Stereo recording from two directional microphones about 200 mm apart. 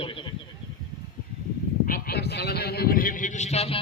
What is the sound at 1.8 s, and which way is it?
A man's voice, 50° left (ahead or behind).